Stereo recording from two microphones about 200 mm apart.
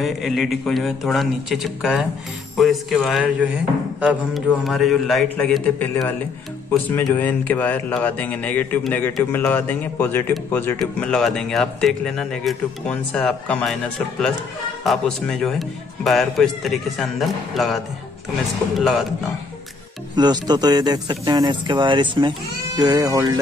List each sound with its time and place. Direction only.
0.0 s speech: centre (ahead or behind)
14.8 s speech: centre (ahead or behind)
18.8 s speech: centre (ahead or behind)
20.2 s speech: 20° right (ahead or behind)